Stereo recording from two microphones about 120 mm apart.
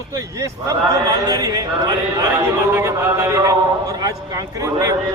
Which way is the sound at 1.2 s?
30° right (ahead or behind).